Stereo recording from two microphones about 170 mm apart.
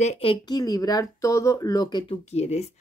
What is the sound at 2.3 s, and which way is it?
Speech, 40° left (ahead or behind).